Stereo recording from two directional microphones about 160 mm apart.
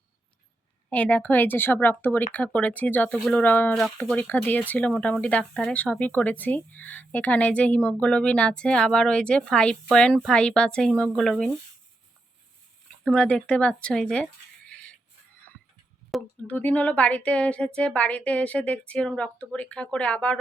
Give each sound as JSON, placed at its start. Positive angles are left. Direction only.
{"t": 0.9, "sound": "speech", "side_deg": 10}
{"t": 13.1, "sound": "speech", "side_deg": 5}
{"t": 16.5, "sound": "speech", "side_deg": 10}